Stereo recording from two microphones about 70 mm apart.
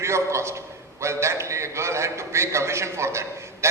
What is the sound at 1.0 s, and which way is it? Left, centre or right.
A man's voice, right.